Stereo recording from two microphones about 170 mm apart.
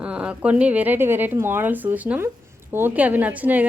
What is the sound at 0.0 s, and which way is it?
A woman's voice, 5° right (ahead or behind).